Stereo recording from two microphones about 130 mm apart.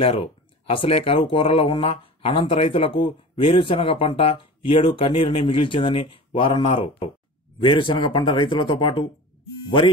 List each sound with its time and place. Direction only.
0.0 s speech: 45° left (ahead or behind)